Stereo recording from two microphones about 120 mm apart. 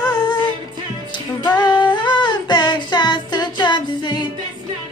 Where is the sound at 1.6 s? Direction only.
40° left (ahead or behind).